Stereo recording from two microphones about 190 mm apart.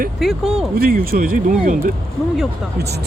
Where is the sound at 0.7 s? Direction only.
50° right (ahead or behind).